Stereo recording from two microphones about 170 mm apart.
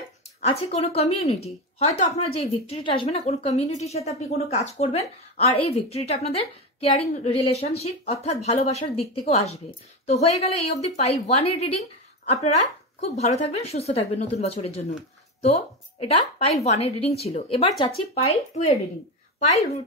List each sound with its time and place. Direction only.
0.4 s a woman's voice: 40° left (ahead or behind)